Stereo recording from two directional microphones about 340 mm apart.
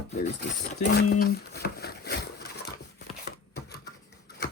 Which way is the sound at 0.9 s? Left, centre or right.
Left.